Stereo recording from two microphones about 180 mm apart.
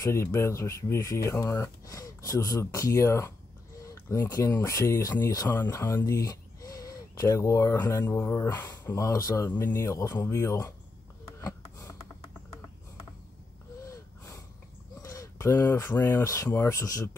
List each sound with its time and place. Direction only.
0.0 s speech: 15° left (ahead or behind)
11.3 s a sound: 15° left (ahead or behind)
13.8 s wheeze: 15° left (ahead or behind)
15.0 s speech: 20° left (ahead or behind)